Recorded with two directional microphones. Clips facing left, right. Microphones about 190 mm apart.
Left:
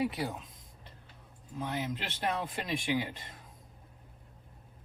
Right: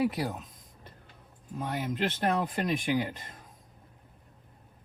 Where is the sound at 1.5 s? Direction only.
50° right (ahead or behind).